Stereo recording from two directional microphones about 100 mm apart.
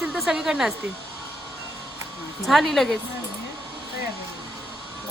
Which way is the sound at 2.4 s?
Centre (ahead or behind).